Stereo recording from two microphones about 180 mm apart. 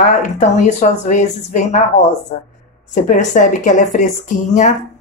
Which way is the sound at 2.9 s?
45° left (ahead or behind).